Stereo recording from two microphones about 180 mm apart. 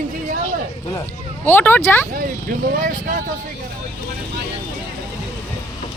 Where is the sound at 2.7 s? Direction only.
50° right (ahead or behind).